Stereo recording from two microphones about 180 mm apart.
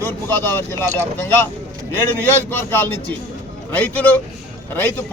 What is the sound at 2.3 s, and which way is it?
A man's voice, 10° left (ahead or behind).